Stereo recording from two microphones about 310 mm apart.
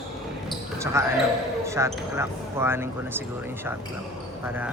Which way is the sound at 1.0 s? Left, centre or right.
Centre.